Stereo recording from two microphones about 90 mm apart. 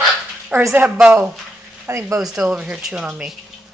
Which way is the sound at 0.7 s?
15° right (ahead or behind).